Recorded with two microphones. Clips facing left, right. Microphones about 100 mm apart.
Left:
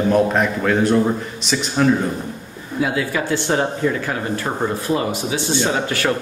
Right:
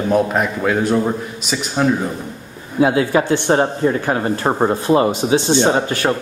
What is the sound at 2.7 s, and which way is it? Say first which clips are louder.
Speech: right 6 dB; 35° right (ahead or behind).